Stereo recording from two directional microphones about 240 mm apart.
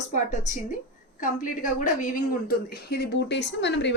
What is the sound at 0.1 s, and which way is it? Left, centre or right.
A woman's voice, left.